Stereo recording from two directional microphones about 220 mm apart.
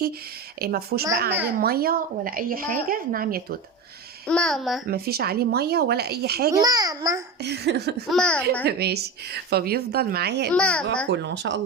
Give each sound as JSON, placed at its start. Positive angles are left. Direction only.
{"t": 0.6, "sound": "a woman's voice", "side_deg": -45}
{"t": 4.3, "sound": "a child's voice", "side_deg": 5}
{"t": 4.9, "sound": "a woman's voice", "side_deg": -45}
{"t": 6.5, "sound": "a child's voice", "side_deg": -15}
{"t": 7.4, "sound": "a woman's voice", "side_deg": -50}
{"t": 8.1, "sound": "a child's voice", "side_deg": 5}
{"t": 8.6, "sound": "a woman's voice", "side_deg": -45}
{"t": 10.5, "sound": "a child's voice", "side_deg": 5}
{"t": 11.1, "sound": "a woman's voice", "side_deg": -50}